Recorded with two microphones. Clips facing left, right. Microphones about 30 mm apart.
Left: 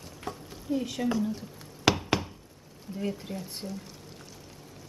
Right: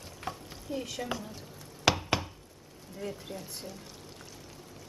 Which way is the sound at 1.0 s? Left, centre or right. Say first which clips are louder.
Left 8 dB; centre.